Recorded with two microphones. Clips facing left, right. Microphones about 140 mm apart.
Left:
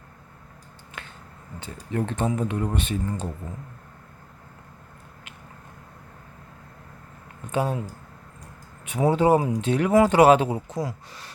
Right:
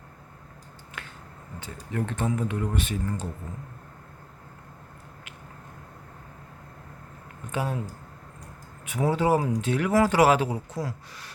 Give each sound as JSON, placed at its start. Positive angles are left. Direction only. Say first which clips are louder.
{"t": 1.0, "sound": "finger snapping", "louder": "left 1 dB", "side_deg": 25}
{"t": 1.5, "sound": "speech", "louder": "left 3 dB", "side_deg": 25}
{"t": 7.5, "sound": "speech", "louder": "left 5 dB", "side_deg": 30}
{"t": 8.8, "sound": "speech", "louder": "left 4 dB", "side_deg": 25}